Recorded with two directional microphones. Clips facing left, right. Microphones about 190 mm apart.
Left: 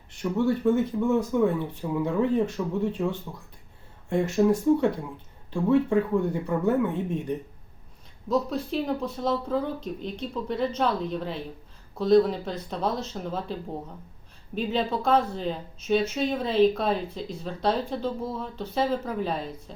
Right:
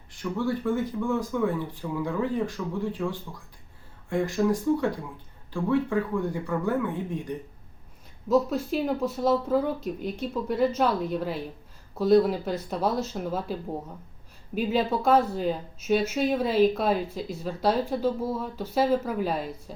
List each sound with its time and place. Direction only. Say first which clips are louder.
0.2 s speech: left 3 dB; 25° left (ahead or behind)
8.3 s speech: right 3 dB; 5° right (ahead or behind)